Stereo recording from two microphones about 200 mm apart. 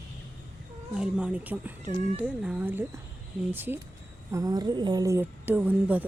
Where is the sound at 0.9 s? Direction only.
5° right (ahead or behind).